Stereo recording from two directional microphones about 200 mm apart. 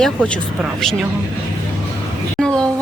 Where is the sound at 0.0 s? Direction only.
5° left (ahead or behind).